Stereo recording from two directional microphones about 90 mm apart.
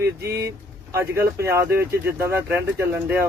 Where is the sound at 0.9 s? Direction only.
30° right (ahead or behind).